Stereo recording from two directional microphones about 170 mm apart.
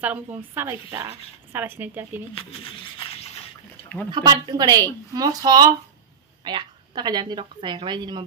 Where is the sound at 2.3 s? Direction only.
30° left (ahead or behind).